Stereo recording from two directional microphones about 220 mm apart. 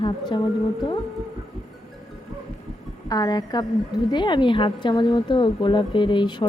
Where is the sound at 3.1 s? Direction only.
15° left (ahead or behind).